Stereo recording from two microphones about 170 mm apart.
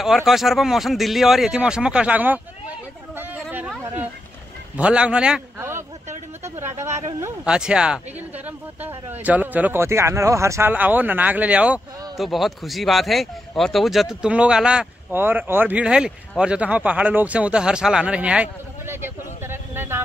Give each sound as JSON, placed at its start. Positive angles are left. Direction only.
{"t": 0.0, "sound": "speech", "side_deg": 0}
{"t": 3.2, "sound": "a sound", "side_deg": -10}
{"t": 4.7, "sound": "speech", "side_deg": -5}
{"t": 7.1, "sound": "speech", "side_deg": -15}
{"t": 7.4, "sound": "speech", "side_deg": -5}